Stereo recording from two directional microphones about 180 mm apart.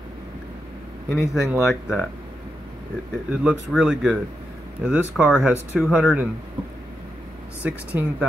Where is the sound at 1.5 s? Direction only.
Centre (ahead or behind).